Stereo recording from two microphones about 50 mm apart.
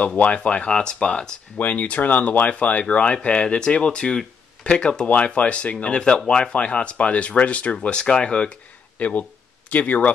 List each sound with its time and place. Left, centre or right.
0.0 s speech: left
1.6 s speech: left
5.9 s speech: centre
8.9 s speech: left